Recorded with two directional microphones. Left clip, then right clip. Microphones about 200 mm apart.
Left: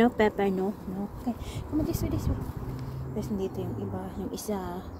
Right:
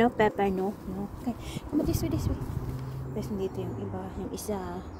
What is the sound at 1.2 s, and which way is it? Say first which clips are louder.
Speech: even; 20° right (ahead or behind).